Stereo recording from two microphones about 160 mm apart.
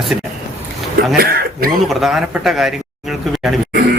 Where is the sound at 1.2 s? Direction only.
75° right (ahead or behind).